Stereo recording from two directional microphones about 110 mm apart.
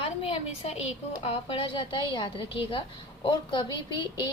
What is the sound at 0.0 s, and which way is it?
A woman's voice, 60° left (ahead or behind).